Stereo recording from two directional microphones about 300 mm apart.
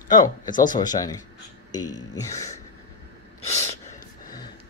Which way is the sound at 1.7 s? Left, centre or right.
Left.